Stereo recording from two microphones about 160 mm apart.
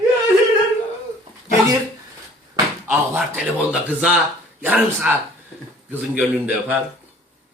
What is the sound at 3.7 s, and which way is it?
Speech, 5° right (ahead or behind).